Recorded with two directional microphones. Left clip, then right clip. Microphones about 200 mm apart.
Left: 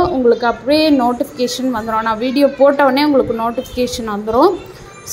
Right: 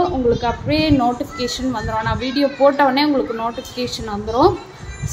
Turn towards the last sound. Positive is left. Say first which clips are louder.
# left 3 dB
turn(degrees=10)  # may be behind; listen again after turning